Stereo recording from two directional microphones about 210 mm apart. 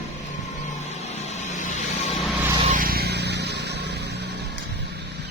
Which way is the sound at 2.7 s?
45° right (ahead or behind).